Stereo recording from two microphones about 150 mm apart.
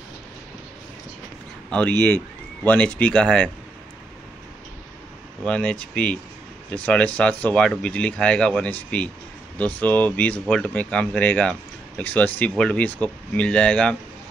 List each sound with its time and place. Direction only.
1.7 s speech: 10° left (ahead or behind)
5.4 s speech: 5° left (ahead or behind)